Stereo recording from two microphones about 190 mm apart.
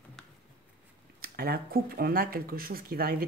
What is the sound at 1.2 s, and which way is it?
Speech, 50° right (ahead or behind).